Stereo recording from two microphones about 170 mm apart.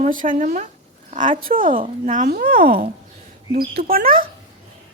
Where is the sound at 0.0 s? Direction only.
50° right (ahead or behind).